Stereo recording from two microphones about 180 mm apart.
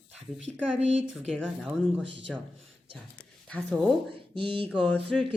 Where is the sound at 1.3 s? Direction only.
5° left (ahead or behind).